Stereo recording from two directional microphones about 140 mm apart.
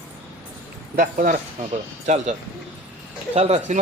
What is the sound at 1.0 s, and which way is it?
Speech, 85° right.